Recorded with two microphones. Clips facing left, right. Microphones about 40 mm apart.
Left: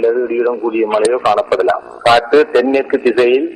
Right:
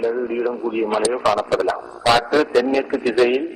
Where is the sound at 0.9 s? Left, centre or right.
Left.